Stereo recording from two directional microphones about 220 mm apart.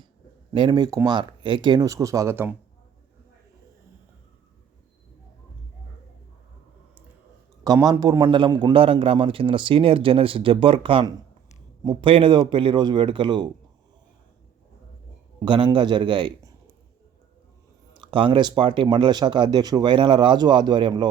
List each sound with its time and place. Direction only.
0.5 s a man's voice: 20° right (ahead or behind)
7.6 s a man's voice: 15° right (ahead or behind)
15.4 s a man's voice: 20° right (ahead or behind)
17.9 s a man's voice: 20° right (ahead or behind)